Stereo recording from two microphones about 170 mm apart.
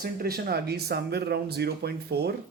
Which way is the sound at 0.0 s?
65° right (ahead or behind).